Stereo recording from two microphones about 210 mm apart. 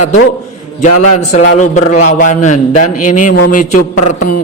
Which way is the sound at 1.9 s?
35° left (ahead or behind).